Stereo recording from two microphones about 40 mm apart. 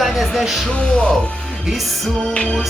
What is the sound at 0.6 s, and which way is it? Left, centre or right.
Music, left.